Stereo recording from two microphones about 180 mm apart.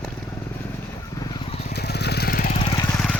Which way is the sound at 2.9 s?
5° left (ahead or behind).